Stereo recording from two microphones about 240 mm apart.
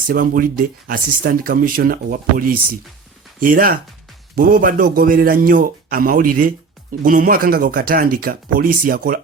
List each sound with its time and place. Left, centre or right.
0.1 s speech: right